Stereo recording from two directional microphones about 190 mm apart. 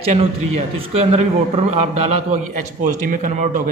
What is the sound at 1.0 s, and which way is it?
A man's voice, 30° right (ahead or behind).